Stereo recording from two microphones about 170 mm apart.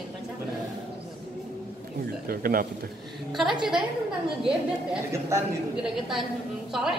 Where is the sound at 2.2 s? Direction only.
60° right (ahead or behind).